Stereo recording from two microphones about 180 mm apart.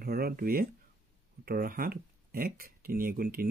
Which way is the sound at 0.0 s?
55° right (ahead or behind).